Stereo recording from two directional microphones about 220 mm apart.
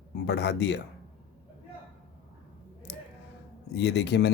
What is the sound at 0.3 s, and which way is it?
Speech, 50° left (ahead or behind).